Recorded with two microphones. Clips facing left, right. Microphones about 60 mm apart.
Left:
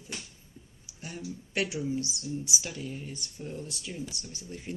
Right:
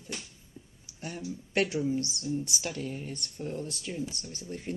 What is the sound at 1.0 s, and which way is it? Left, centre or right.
Speech, right.